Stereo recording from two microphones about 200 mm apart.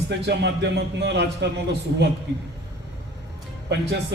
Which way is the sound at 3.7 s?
60° right (ahead or behind).